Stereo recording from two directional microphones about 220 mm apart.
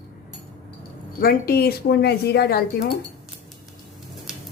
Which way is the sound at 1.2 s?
45° left (ahead or behind).